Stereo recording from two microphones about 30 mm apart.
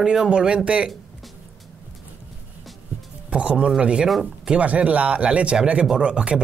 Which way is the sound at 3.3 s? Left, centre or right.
Right.